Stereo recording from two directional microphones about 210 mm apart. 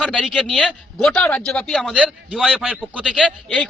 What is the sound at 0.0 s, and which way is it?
A man's voice, centre (ahead or behind).